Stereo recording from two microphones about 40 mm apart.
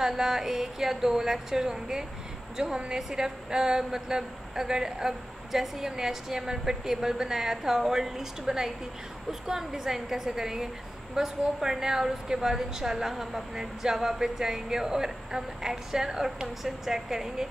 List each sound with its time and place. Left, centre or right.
0.0 s a woman's voice: centre